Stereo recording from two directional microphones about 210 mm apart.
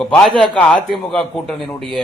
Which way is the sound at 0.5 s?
5° left (ahead or behind).